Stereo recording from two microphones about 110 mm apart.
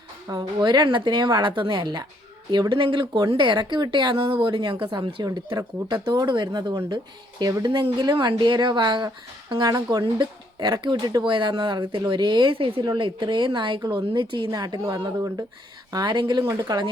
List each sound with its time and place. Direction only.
0.3 s a woman's voice: 40° right (ahead or behind)
15.9 s a woman's voice: 40° right (ahead or behind)
16.4 s speech: 35° right (ahead or behind)